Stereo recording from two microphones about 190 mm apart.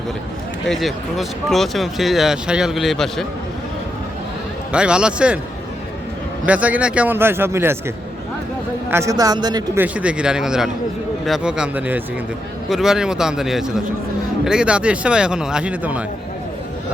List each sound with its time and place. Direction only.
0.7 s speech: centre (ahead or behind)
4.7 s speech: 5° right (ahead or behind)
6.4 s speech: 5° right (ahead or behind)
9.8 s speech: 5° right (ahead or behind)